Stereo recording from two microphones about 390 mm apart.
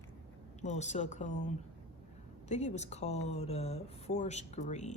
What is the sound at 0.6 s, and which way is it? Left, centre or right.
Speech, centre.